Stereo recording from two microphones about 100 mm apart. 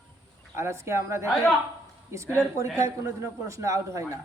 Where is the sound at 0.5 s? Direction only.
25° right (ahead or behind).